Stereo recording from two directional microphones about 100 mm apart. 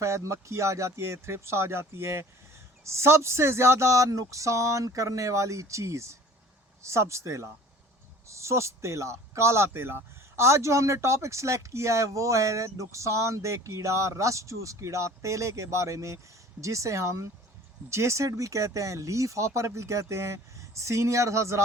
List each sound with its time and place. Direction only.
0.0 s speech: 30° right (ahead or behind)